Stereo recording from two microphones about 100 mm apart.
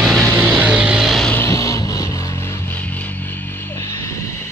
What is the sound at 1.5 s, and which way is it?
Vehicle, 35° left (ahead or behind).